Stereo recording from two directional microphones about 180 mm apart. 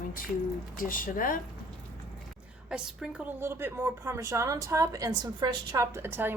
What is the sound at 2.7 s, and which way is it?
A woman's voice, 5° right (ahead or behind).